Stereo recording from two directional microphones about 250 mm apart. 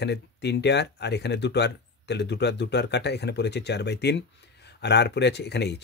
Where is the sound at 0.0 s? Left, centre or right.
Left.